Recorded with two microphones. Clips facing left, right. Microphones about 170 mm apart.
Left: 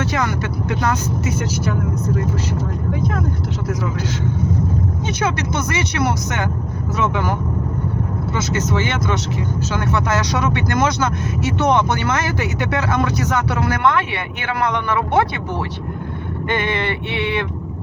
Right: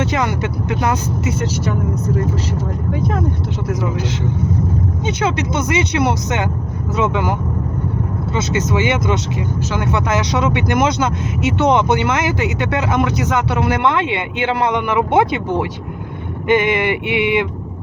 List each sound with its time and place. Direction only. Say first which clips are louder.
0.0 s speech: right 2 dB; 20° right (ahead or behind)
5.0 s speech: right 4 dB; 25° right (ahead or behind)
8.7 s speech: right 5 dB; 15° right (ahead or behind)
16.5 s speech: right 7 dB; 15° right (ahead or behind)